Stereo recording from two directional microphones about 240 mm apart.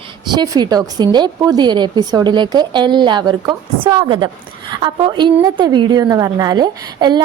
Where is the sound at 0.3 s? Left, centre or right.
Centre.